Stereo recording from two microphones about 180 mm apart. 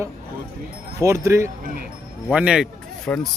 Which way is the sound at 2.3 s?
5° right (ahead or behind).